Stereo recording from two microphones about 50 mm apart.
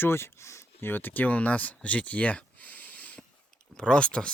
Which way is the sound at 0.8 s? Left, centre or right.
Left.